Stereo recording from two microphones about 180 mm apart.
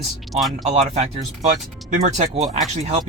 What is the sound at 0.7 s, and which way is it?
Speech, 35° right (ahead or behind).